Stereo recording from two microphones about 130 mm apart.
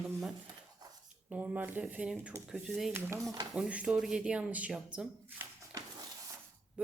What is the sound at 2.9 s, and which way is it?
Speech, 15° right (ahead or behind).